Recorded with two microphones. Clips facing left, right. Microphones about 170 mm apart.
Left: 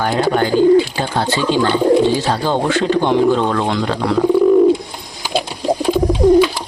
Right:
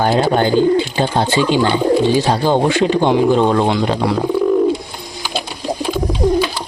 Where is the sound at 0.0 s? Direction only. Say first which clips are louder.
Right 2 dB; 25° right (ahead or behind).